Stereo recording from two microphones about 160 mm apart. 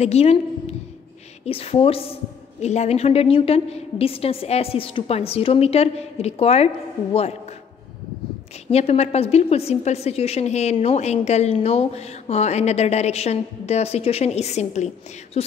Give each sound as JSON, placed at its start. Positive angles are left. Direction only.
{"t": 0.0, "sound": "a woman's voice", "side_deg": 40}
{"t": 8.6, "sound": "a woman's voice", "side_deg": 40}